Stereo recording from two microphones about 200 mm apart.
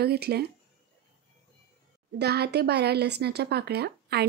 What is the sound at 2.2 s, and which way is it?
Speech, 55° right (ahead or behind).